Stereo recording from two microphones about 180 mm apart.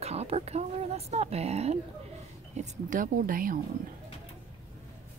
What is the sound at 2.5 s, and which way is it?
Speech, 45° right (ahead or behind).